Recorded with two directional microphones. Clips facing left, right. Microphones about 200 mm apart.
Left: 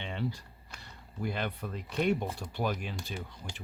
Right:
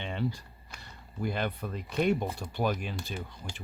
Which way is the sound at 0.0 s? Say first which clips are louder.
Right 2 dB; 45° right (ahead or behind).